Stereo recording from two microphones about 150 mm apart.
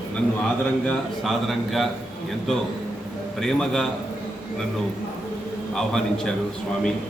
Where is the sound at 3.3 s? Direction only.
5° left (ahead or behind).